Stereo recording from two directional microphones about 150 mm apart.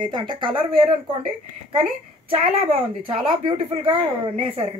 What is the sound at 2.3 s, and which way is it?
A woman's voice, 40° right (ahead or behind).